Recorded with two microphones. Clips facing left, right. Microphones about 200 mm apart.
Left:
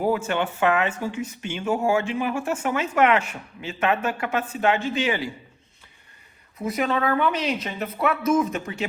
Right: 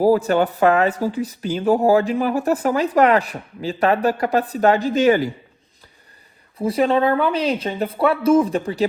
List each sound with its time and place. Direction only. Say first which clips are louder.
0.0 s speech: right 8 dB; 35° right (ahead or behind)
6.6 s speech: right 7 dB; 30° right (ahead or behind)